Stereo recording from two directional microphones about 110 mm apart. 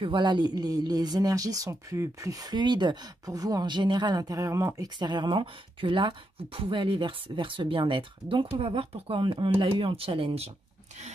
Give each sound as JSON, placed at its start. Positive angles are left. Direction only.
{"t": 0.0, "sound": "speech", "side_deg": -45}